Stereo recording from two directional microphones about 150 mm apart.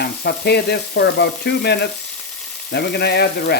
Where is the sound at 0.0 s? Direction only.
90° left.